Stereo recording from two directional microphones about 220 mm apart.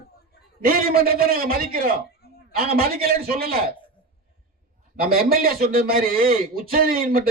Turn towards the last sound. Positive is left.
turn(degrees=-40)  # may be behind; listen again after turning